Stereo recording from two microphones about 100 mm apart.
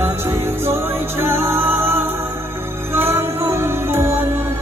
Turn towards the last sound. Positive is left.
turn(degrees=-25)  # may be behind; listen again after turning